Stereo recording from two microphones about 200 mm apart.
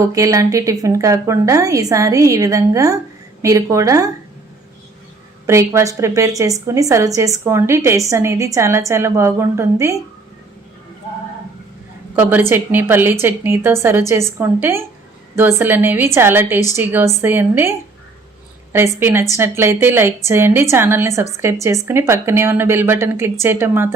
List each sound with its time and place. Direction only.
0.1 s a woman's voice: 15° right (ahead or behind)
5.5 s a woman's voice: 15° right (ahead or behind)
12.1 s a woman's voice: 10° right (ahead or behind)
18.9 s a woman's voice: 10° right (ahead or behind)